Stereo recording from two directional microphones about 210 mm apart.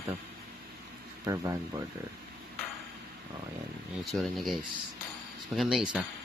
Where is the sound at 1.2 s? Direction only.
15° right (ahead or behind).